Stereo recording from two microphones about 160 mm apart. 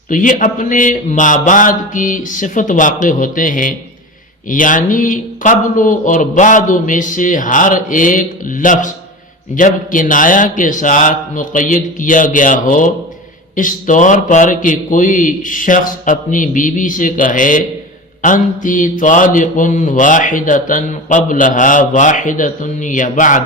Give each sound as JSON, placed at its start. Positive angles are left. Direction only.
{"t": 0.1, "sound": "speech", "side_deg": 55}